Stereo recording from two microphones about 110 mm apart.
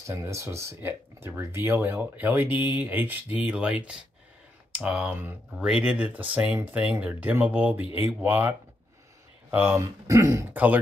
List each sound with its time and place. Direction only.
0.0 s speech: 25° right (ahead or behind)
9.8 s speech: 30° right (ahead or behind)
10.5 s speech: 15° right (ahead or behind)